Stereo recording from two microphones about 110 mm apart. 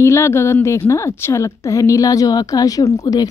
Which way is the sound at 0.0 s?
25° left (ahead or behind).